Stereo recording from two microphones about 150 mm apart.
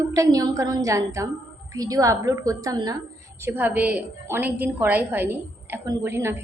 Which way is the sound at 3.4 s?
10° right (ahead or behind).